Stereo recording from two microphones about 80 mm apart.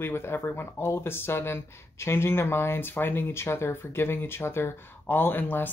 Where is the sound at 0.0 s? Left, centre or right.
Left.